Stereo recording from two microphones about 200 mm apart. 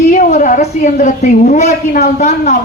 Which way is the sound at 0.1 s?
40° left (ahead or behind).